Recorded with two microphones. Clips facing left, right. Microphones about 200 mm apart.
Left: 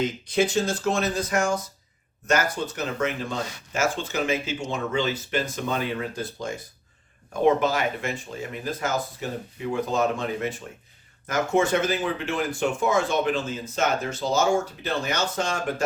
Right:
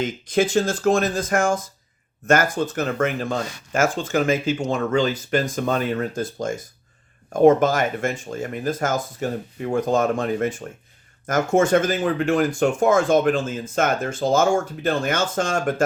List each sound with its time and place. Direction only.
0.0 s speech: 50° right (ahead or behind)